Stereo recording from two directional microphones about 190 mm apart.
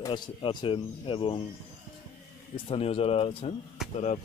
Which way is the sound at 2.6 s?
30° left (ahead or behind).